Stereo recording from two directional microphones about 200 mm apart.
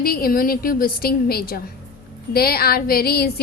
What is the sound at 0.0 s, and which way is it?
A woman's voice, 50° left (ahead or behind).